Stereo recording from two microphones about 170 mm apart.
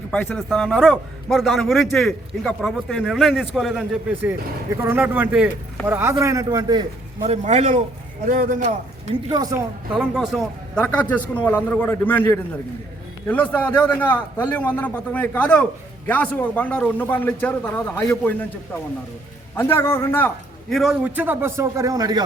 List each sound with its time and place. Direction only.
0.1 s a man's voice: centre (ahead or behind)
4.1 s a man's voice: 10° right (ahead or behind)
7.3 s a man's voice: 40° right (ahead or behind)
9.3 s speech: 20° right (ahead or behind)
9.9 s a man's voice: 5° right (ahead or behind)
19.5 s a man's voice: 15° left (ahead or behind)
20.7 s a man's voice: 5° right (ahead or behind); by 22.2 s 20° right (ahead or behind)